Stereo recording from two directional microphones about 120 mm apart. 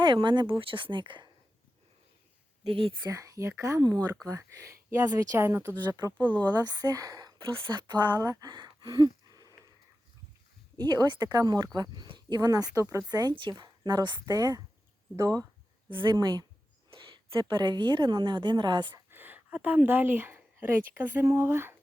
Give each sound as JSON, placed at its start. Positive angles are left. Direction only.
{"t": 0.0, "sound": "speech", "side_deg": -40}
{"t": 2.6, "sound": "speech", "side_deg": -50}
{"t": 3.1, "sound": "speech", "side_deg": -25}
{"t": 5.7, "sound": "speech", "side_deg": -30}
{"t": 6.1, "sound": "speech", "side_deg": 10}
{"t": 6.5, "sound": "speech", "side_deg": -35}
{"t": 8.2, "sound": "a sound", "side_deg": -30}
{"t": 10.8, "sound": "speech", "side_deg": -35}
{"t": 15.9, "sound": "a woman's voice", "side_deg": -40}
{"t": 19.1, "sound": "speech", "side_deg": -15}